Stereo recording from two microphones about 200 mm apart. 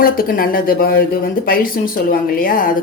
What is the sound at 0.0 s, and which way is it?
Speech, 45° left (ahead or behind).